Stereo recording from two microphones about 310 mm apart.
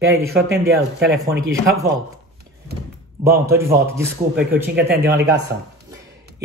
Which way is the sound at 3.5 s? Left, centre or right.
Centre.